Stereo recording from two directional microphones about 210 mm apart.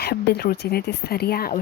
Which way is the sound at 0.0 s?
50° left (ahead or behind).